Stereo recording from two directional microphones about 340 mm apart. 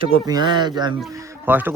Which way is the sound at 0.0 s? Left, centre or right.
Centre.